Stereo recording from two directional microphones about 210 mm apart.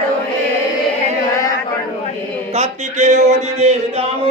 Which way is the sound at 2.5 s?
35° right (ahead or behind).